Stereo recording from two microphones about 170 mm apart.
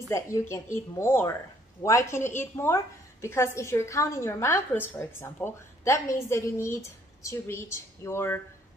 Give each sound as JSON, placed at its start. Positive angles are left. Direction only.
{"t": 0.1, "sound": "a woman's voice", "side_deg": 15}